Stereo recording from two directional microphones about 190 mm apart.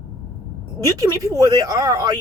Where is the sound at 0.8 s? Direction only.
15° right (ahead or behind).